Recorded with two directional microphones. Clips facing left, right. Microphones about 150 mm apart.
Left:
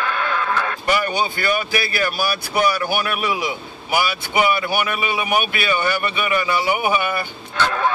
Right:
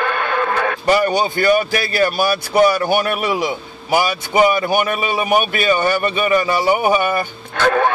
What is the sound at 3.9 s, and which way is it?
Speech, 45° right (ahead or behind).